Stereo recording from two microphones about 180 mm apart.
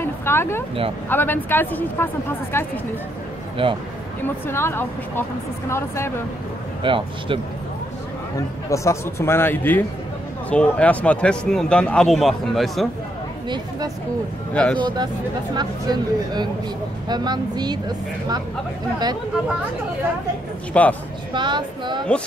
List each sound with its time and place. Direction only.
0.0 s a man's voice: 15° left (ahead or behind)
3.6 s speech: 30° right (ahead or behind)
4.2 s a man's voice: 15° left (ahead or behind)
6.8 s speech: 30° right (ahead or behind)
8.6 s a man's voice: 15° left (ahead or behind); by 12.8 s centre (ahead or behind)
14.5 s speech: 5° left (ahead or behind)
15.5 s speech: 25° right (ahead or behind)
20.7 s a man's voice: 5° left (ahead or behind)
21.3 s speech: 25° right (ahead or behind)